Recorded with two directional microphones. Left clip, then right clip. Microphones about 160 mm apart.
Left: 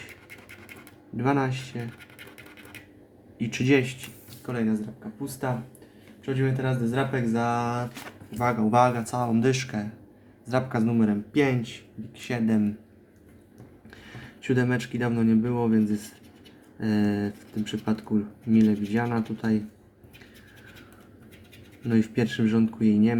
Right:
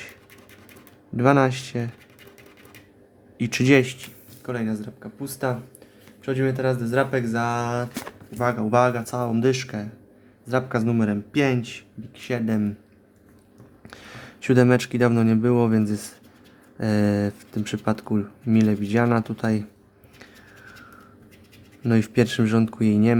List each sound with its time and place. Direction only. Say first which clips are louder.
1.1 s speech: right 7 dB; 50° right (ahead or behind)
3.3 s speech: right 5 dB; 50° right (ahead or behind)
12.1 s speech: right 1 dB; 25° right (ahead or behind)
13.8 s speech: right 5 dB; 50° right (ahead or behind)
21.8 s speech: right 5 dB; 50° right (ahead or behind)